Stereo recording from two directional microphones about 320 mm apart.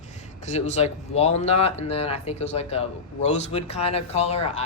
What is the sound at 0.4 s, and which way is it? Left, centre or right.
Speech, left.